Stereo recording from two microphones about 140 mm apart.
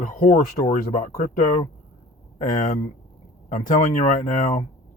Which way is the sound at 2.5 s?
70° left (ahead or behind).